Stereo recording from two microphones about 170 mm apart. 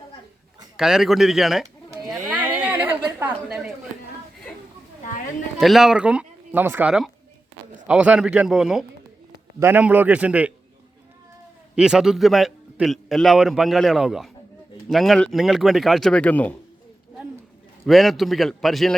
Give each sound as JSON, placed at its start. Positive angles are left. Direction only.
{"t": 0.8, "sound": "a man's voice", "side_deg": 0}
{"t": 2.1, "sound": "a sound", "side_deg": -10}
{"t": 5.0, "sound": "a sound", "side_deg": 50}
{"t": 5.5, "sound": "a man's voice", "side_deg": 0}
{"t": 11.7, "sound": "a man's voice", "side_deg": -5}
{"t": 17.8, "sound": "a man's voice", "side_deg": 0}